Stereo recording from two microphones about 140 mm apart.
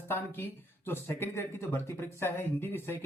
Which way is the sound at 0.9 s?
15° left (ahead or behind).